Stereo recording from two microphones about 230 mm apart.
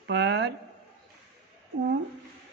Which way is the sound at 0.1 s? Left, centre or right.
Right.